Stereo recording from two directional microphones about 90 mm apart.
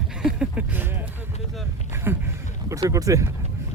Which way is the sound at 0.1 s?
5° right (ahead or behind).